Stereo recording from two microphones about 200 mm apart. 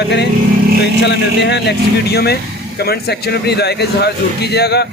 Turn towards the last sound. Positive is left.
turn(degrees=55)  # may be behind; listen again after turning